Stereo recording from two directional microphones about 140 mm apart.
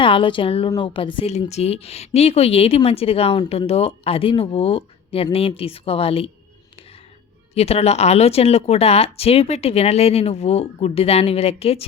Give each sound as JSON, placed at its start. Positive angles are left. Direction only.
{"t": 0.0, "sound": "a woman's voice", "side_deg": 40}
{"t": 1.3, "sound": "speech", "side_deg": 50}
{"t": 7.5, "sound": "speech", "side_deg": 50}